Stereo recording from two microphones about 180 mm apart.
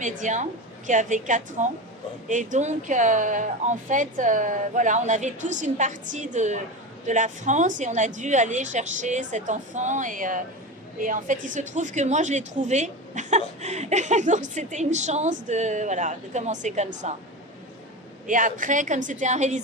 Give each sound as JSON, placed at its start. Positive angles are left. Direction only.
{"t": 0.0, "sound": "a woman's voice", "side_deg": -45}
{"t": 18.3, "sound": "a woman's voice", "side_deg": -45}